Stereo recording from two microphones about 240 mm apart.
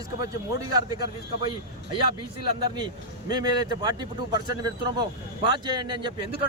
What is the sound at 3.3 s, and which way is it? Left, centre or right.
A man's voice, centre.